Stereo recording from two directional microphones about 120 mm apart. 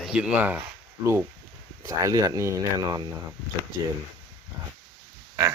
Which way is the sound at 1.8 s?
30° right (ahead or behind).